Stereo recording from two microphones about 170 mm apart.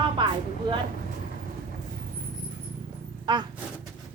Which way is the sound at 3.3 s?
25° right (ahead or behind).